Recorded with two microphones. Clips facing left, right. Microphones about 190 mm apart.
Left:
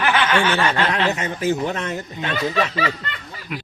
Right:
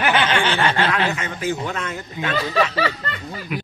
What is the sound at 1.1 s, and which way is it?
Speech, 40° left (ahead or behind).